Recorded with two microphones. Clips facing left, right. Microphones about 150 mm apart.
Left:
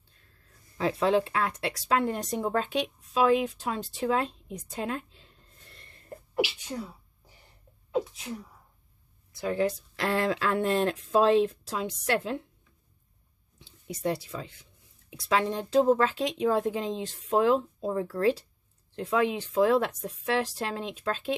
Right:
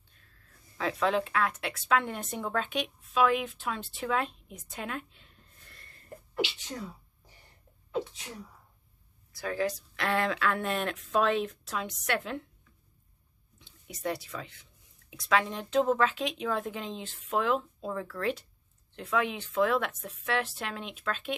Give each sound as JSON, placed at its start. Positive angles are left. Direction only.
{"t": 0.7, "sound": "speech", "side_deg": 30}
{"t": 6.3, "sound": "speech", "side_deg": 10}
{"t": 9.3, "sound": "speech", "side_deg": 25}
{"t": 13.6, "sound": "speech", "side_deg": 30}